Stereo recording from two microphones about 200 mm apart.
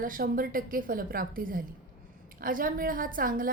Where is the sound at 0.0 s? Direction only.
45° right (ahead or behind).